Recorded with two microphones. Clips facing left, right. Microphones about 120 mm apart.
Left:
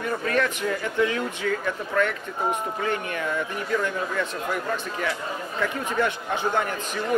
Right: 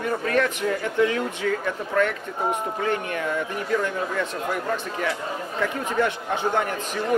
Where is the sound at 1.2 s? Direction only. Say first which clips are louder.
Right 1 dB; 35° right (ahead or behind).